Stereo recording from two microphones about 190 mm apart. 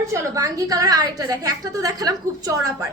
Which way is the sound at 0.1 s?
20° right (ahead or behind).